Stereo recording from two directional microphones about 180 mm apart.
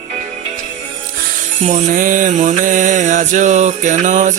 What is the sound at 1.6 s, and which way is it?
Mantra, 45° right (ahead or behind).